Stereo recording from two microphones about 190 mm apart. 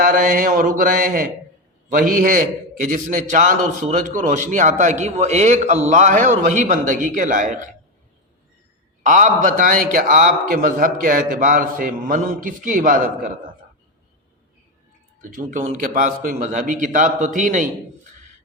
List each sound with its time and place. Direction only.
0.0 s a man's voice: 45° right (ahead or behind)
9.0 s a man's voice: 45° right (ahead or behind)
15.2 s a man's voice: 45° right (ahead or behind)